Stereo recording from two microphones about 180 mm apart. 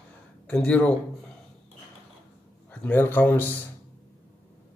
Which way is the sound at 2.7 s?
10° left (ahead or behind).